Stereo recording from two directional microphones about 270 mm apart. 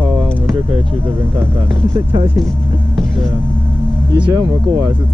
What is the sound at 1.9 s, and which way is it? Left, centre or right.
Speech, centre.